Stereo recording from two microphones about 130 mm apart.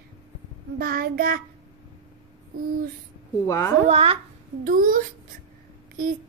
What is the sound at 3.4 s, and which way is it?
Speech, 25° left (ahead or behind).